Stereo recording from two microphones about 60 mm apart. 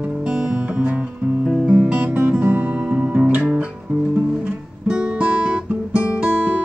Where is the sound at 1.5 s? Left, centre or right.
Centre.